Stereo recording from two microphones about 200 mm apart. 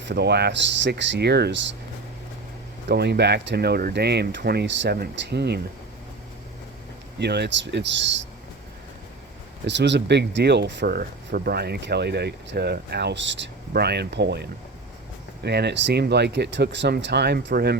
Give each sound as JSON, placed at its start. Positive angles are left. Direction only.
{"t": 0.0, "sound": "speech", "side_deg": -55}
{"t": 2.9, "sound": "speech", "side_deg": -55}
{"t": 7.2, "sound": "speech", "side_deg": -55}
{"t": 9.6, "sound": "speech", "side_deg": -60}
{"t": 15.4, "sound": "speech", "side_deg": -55}